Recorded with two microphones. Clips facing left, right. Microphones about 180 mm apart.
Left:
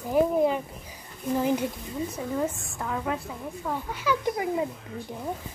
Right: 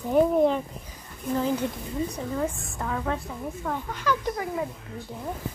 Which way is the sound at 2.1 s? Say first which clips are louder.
Even; centre (ahead or behind).